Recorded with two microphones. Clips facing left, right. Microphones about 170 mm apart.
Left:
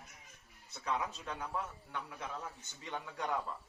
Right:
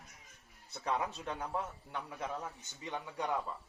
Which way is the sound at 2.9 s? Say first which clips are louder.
Right 2 dB; 20° right (ahead or behind).